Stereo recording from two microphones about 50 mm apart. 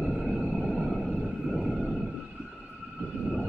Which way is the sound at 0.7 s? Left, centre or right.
Centre.